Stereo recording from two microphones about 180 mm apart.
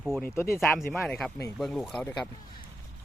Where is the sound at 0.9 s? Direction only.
5° left (ahead or behind).